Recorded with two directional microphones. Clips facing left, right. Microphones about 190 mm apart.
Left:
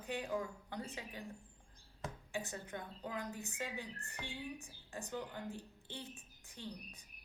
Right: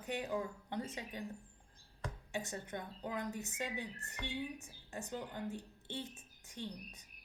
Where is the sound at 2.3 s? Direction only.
25° right (ahead or behind).